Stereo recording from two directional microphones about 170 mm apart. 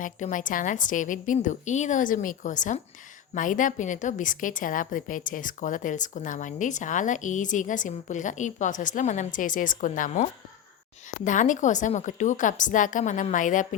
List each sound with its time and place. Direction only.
0.0 s a woman's voice: 50° left (ahead or behind)